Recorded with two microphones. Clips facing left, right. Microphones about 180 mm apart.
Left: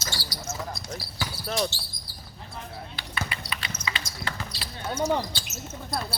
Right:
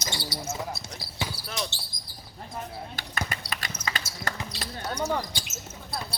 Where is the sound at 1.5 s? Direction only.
45° left (ahead or behind).